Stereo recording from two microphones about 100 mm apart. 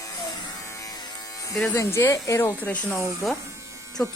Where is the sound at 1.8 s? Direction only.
30° left (ahead or behind).